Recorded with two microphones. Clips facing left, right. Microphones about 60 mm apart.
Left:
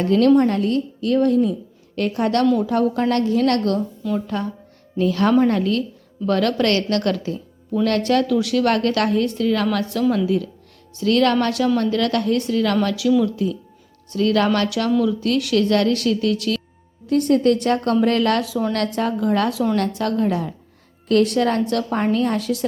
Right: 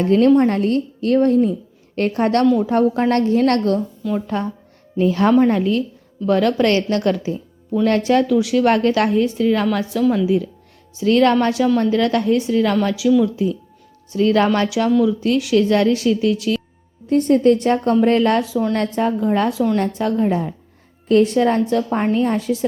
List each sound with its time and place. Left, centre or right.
0.0 s a woman's voice: right
4.0 s a woman's voice: centre
4.9 s a woman's voice: right; by 10.2 s centre
10.2 s a woman's voice: centre